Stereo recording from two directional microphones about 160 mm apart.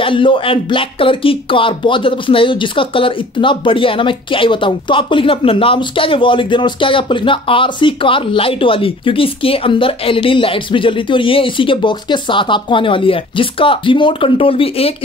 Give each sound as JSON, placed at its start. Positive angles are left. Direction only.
{"t": 0.0, "sound": "speech", "side_deg": 30}